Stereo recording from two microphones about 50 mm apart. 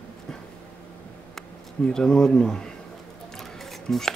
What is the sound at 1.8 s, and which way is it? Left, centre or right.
Speech, centre.